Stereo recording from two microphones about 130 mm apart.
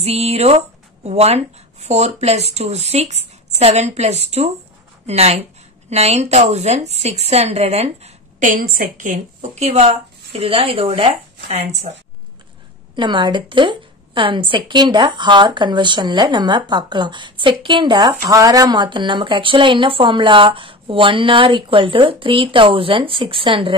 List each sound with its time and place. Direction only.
0.0 s speech: 55° right (ahead or behind)
8.5 s a woman's voice: 90° right; by 11.9 s 50° right (ahead or behind)
12.9 s a woman's voice: 35° right (ahead or behind)